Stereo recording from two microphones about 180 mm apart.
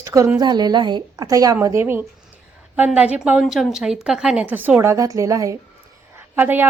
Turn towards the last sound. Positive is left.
turn(degrees=-10)  # may be behind; listen again after turning